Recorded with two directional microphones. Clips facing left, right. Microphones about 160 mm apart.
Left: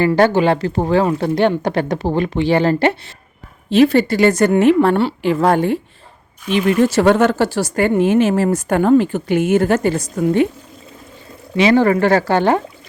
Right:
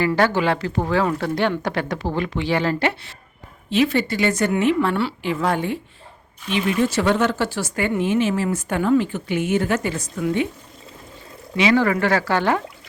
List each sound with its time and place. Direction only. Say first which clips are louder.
0.0 s a woman's voice: left 6 dB; 25° left (ahead or behind)
6.8 s speech: left 7 dB; 45° left (ahead or behind)
11.5 s speech: left 5 dB; 35° left (ahead or behind)